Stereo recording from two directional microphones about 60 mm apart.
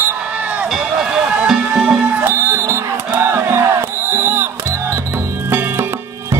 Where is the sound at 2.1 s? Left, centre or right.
Right.